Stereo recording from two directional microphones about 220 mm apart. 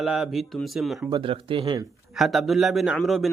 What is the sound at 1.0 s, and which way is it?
Speech, 20° right (ahead or behind).